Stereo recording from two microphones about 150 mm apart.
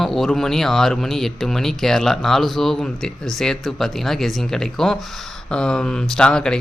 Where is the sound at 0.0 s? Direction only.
Centre (ahead or behind).